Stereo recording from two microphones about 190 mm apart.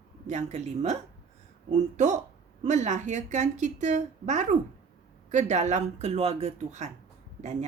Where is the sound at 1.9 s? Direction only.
40° right (ahead or behind).